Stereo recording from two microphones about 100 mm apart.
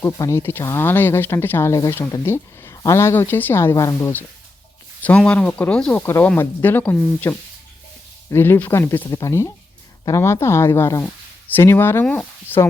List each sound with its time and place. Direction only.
0.0 s speech: 30° left (ahead or behind)
1.7 s speech: 35° left (ahead or behind)
4.0 s speech: 20° left (ahead or behind)
5.0 s speech: 10° left (ahead or behind)
8.3 s speech: 20° left (ahead or behind)
9.0 s speech: 35° left (ahead or behind)